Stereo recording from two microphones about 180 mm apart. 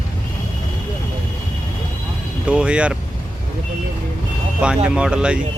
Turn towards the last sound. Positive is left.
turn(degrees=-5)  # may be behind; listen again after turning